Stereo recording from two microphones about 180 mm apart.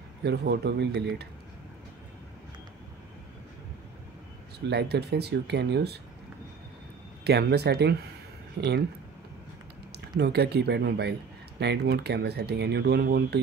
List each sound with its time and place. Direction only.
0.2 s speech: 70° right (ahead or behind)
4.6 s speech: 65° right (ahead or behind)
7.2 s speech: 65° right (ahead or behind)
9.9 s speech: 65° right (ahead or behind)